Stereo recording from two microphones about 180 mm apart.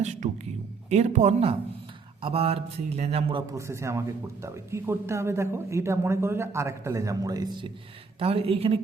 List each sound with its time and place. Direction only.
0.0 s a man's voice: 40° right (ahead or behind)
0.9 s mantra: 40° right (ahead or behind)
3.5 s speech: 15° right (ahead or behind)
8.2 s mantra: 30° right (ahead or behind)